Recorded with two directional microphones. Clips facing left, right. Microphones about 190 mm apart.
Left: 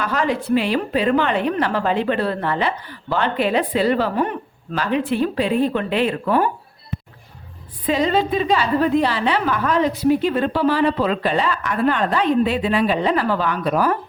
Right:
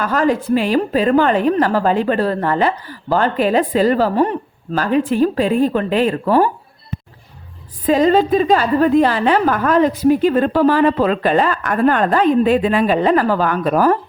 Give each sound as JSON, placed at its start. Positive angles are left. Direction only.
{"t": 0.0, "sound": "a woman's voice", "side_deg": -45}
{"t": 7.9, "sound": "a woman's voice", "side_deg": -45}